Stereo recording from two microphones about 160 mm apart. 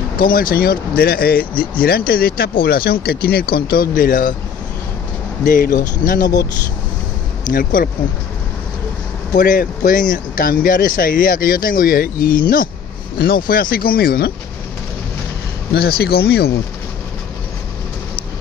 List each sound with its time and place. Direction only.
0.2 s speech: 65° left (ahead or behind)
3.9 s speech: 60° left (ahead or behind)
5.4 s speech: 60° left (ahead or behind)
7.4 s speech: 65° left (ahead or behind)
9.3 s speech: 60° left (ahead or behind)
15.7 s speech: 80° left